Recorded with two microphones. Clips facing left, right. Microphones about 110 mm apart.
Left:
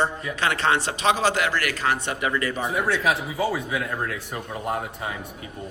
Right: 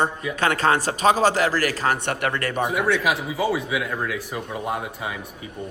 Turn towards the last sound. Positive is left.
turn(degrees=-10)  # may be behind; listen again after turning